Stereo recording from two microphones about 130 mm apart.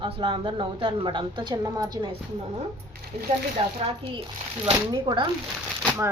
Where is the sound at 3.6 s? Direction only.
40° right (ahead or behind).